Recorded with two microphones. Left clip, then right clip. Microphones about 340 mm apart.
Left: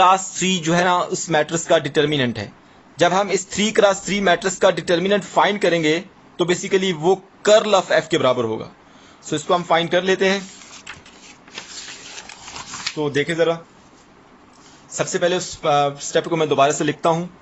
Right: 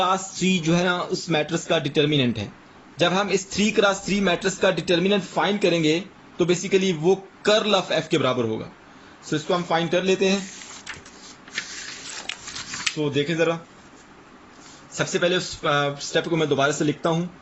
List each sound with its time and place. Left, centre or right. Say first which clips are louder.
0.0 s speech: left 7 dB; left
13.1 s speech: left 5 dB; left
14.9 s speech: left 2 dB; centre